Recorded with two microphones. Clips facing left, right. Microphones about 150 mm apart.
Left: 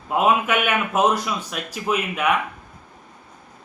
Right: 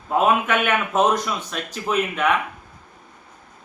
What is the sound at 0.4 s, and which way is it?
A man's voice, 10° left (ahead or behind).